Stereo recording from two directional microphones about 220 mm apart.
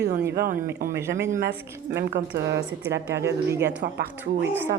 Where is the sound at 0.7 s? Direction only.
40° right (ahead or behind).